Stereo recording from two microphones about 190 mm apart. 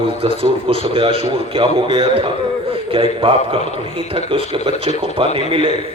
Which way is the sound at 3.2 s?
30° right (ahead or behind).